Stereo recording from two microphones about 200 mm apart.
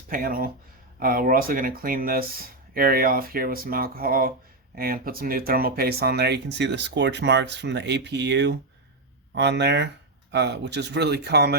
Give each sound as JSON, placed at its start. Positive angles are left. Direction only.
{"t": 0.1, "sound": "speech", "side_deg": -45}